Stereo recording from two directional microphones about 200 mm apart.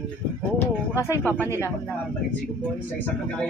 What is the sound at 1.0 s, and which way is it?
Speech, 10° left (ahead or behind).